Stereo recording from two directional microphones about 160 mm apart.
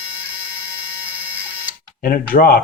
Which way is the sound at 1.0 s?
10° right (ahead or behind).